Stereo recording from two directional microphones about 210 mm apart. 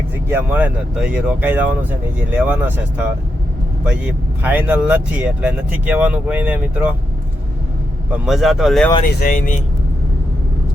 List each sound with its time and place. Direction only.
0.3 s speech: 10° right (ahead or behind)
3.8 s speech: 10° right (ahead or behind)
8.1 s speech: 5° right (ahead or behind)
9.2 s speech: 40° left (ahead or behind)